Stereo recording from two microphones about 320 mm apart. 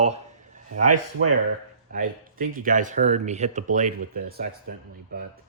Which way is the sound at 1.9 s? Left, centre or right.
Right.